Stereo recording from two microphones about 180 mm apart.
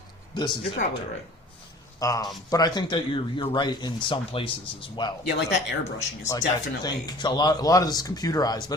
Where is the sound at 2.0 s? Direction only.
20° left (ahead or behind).